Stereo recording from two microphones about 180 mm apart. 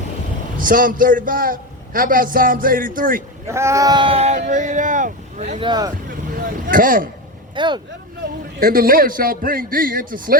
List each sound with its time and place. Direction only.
0.6 s a man's voice: 50° right (ahead or behind)
3.5 s a man's voice: 15° right (ahead or behind); by 5.5 s 45° right (ahead or behind)
5.5 s speech: 25° right (ahead or behind)
6.3 s a sound: 50° right (ahead or behind)
7.5 s speech: 25° right (ahead or behind)
8.5 s a man's voice: 55° right (ahead or behind)